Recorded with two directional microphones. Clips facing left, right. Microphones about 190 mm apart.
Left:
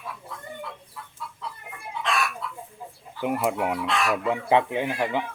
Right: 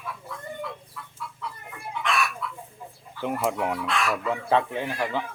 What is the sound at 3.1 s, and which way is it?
Speech, 10° left (ahead or behind).